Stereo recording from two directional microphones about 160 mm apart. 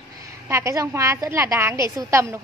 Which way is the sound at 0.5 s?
20° right (ahead or behind).